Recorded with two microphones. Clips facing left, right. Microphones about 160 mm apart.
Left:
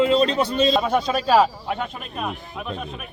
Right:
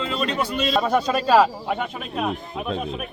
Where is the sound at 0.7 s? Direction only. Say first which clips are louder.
Even; centre (ahead or behind).